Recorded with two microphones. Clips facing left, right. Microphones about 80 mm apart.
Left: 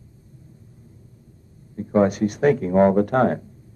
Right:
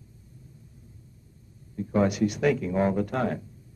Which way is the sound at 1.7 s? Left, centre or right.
Left.